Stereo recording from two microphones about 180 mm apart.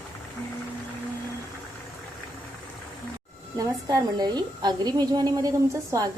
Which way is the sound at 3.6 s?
20° right (ahead or behind).